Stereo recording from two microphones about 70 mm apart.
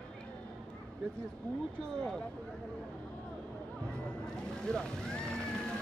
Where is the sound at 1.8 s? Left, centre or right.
Centre.